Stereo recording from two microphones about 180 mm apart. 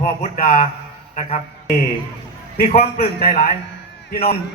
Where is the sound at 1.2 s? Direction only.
35° left (ahead or behind).